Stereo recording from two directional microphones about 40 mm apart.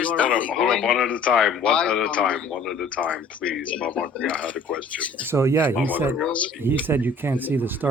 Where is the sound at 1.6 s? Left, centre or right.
Left.